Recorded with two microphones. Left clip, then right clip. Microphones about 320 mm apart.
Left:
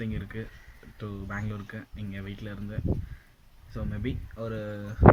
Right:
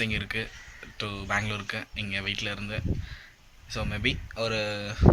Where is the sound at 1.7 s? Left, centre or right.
Right.